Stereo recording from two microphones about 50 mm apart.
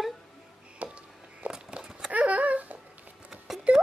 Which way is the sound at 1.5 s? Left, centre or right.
Centre.